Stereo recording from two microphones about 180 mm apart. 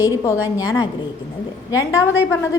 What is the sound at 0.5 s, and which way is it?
A woman's voice, 20° left (ahead or behind).